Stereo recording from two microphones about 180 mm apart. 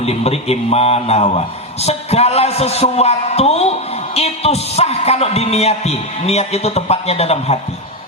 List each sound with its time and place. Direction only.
0.0 s a man's voice: 35° left (ahead or behind)